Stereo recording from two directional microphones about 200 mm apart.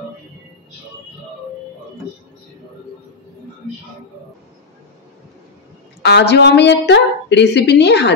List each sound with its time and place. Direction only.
6.0 s a woman's voice: 55° left (ahead or behind)